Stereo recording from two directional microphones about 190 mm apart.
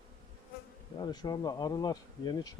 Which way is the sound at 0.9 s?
20° left (ahead or behind).